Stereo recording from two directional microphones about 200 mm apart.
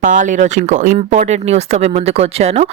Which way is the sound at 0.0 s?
40° right (ahead or behind).